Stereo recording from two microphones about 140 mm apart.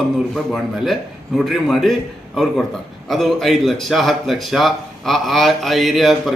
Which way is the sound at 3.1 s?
Centre (ahead or behind).